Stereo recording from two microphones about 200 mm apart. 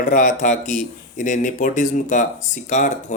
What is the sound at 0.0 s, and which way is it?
Speech, 40° left (ahead or behind).